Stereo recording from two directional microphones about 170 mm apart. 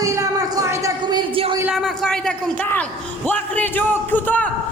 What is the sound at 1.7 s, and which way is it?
A man's voice, 5° left (ahead or behind).